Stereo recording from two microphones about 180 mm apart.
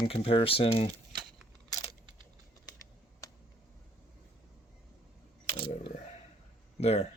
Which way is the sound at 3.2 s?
20° left (ahead or behind).